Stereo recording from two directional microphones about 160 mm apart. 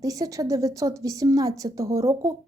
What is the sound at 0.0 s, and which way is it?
Speech, 20° right (ahead or behind).